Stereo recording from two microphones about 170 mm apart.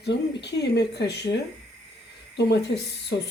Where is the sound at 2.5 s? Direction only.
80° left.